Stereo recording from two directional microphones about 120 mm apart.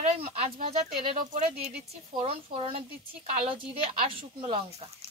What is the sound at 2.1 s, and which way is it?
A woman's voice, 50° right (ahead or behind).